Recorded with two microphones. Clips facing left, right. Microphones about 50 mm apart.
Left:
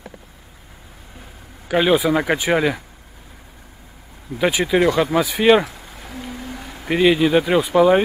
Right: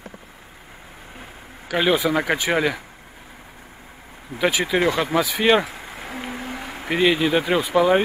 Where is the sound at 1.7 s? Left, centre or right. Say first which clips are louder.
Left 3 dB; centre.